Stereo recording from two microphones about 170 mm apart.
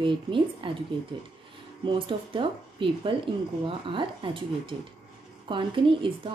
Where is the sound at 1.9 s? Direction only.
30° right (ahead or behind).